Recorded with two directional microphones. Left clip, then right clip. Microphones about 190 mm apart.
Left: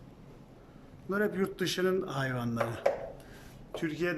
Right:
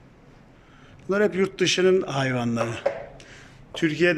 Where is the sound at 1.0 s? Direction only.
10° right (ahead or behind).